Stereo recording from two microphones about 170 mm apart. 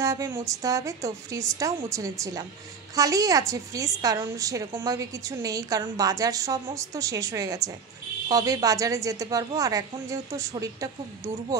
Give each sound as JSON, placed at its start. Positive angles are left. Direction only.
{"t": 0.0, "sound": "a woman's voice", "side_deg": -20}